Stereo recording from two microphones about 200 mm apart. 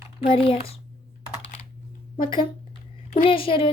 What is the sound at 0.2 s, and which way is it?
Speech, 25° left (ahead or behind).